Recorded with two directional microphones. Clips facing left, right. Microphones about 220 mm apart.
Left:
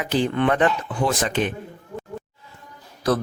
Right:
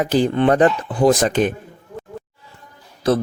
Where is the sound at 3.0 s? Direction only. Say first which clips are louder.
Right 4 dB; 25° right (ahead or behind).